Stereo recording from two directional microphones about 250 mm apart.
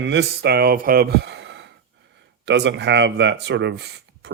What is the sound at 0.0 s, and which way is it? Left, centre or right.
Speech, right.